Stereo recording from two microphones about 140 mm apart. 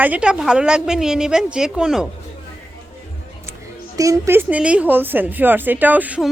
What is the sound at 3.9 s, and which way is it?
A woman's voice, 25° right (ahead or behind).